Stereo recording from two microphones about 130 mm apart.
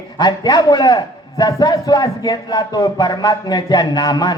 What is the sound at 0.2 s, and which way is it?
Speech, 30° left (ahead or behind).